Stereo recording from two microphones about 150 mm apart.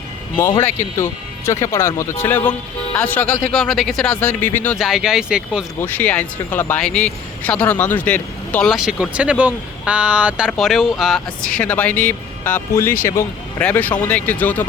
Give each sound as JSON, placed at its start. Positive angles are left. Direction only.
{"t": 0.6, "sound": "speech", "side_deg": 15}
{"t": 3.5, "sound": "speech", "side_deg": 0}
{"t": 4.8, "sound": "speech", "side_deg": -5}
{"t": 5.8, "sound": "speech", "side_deg": 10}
{"t": 8.7, "sound": "speech", "side_deg": -5}